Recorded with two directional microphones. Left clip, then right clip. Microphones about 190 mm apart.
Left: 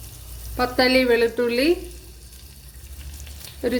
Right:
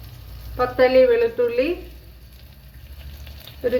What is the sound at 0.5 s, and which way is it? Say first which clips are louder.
A woman's voice: right 3 dB; 50° left (ahead or behind).